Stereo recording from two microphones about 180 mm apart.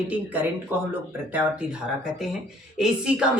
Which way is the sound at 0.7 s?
10° right (ahead or behind).